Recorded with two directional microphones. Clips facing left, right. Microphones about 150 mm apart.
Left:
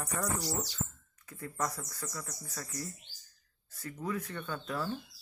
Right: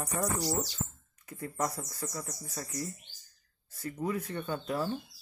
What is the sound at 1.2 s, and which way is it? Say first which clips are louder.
Speech: right 3 dB; 25° right (ahead or behind).